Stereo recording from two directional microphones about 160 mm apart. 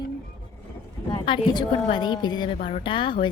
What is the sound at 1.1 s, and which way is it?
A woman's voice, 30° left (ahead or behind).